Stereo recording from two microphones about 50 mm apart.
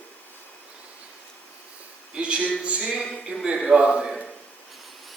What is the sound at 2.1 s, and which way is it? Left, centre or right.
Speech, right.